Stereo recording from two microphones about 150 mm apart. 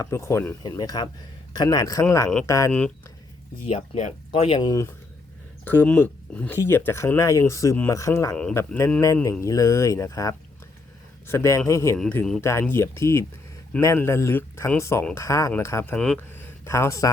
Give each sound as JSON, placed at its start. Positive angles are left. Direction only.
{"t": 0.0, "sound": "speech", "side_deg": 20}
{"t": 3.7, "sound": "speech", "side_deg": 50}
{"t": 4.3, "sound": "speech", "side_deg": 35}
{"t": 5.6, "sound": "a man's voice", "side_deg": 10}
{"t": 11.9, "sound": "speech", "side_deg": 10}
{"t": 12.4, "sound": "a man's voice", "side_deg": 20}